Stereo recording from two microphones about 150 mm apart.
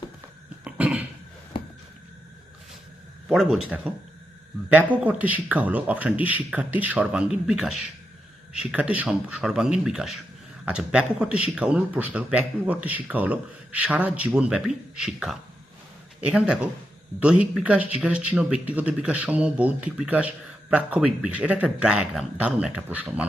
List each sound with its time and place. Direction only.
0.6 s cough: 10° right (ahead or behind)
1.5 s a sound: 35° left (ahead or behind)
3.2 s speech: 5° right (ahead or behind)